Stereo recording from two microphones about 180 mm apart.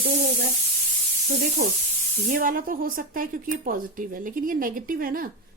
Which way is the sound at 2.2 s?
50° right (ahead or behind).